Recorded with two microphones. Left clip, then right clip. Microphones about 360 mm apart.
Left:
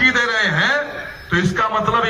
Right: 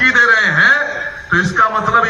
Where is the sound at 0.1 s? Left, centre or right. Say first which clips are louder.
Right 6 dB; centre.